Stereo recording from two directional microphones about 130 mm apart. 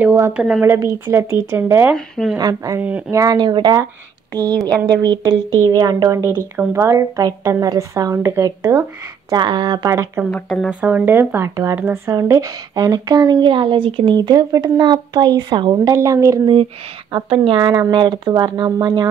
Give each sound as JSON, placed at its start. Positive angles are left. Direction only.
{"t": 0.0, "sound": "a woman's voice", "side_deg": -20}
{"t": 0.3, "sound": "a woman's voice", "side_deg": -5}
{"t": 0.7, "sound": "speech", "side_deg": -20}
{"t": 2.0, "sound": "speech", "side_deg": 5}
{"t": 2.3, "sound": "speech", "side_deg": -30}
{"t": 9.3, "sound": "speech", "side_deg": -35}
{"t": 10.3, "sound": "speech", "side_deg": 5}
{"t": 10.7, "sound": "speech", "side_deg": -10}
{"t": 17.1, "sound": "speech", "side_deg": -40}